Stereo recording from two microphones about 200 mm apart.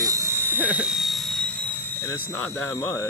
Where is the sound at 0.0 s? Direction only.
15° right (ahead or behind).